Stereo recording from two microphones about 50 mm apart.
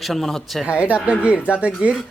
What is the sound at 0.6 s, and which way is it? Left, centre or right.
Speech, right.